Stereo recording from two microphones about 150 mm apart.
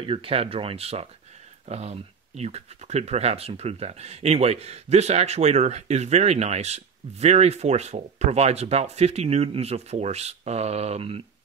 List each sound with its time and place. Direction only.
0.0 s speech: 35° right (ahead or behind)